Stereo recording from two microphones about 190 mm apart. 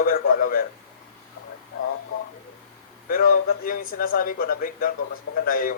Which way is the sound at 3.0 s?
50° left (ahead or behind).